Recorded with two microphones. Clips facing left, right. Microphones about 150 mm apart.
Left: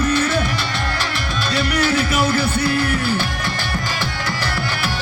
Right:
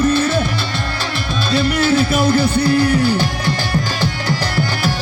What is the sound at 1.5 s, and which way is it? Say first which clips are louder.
Music: right 4 dB; 30° right (ahead or behind).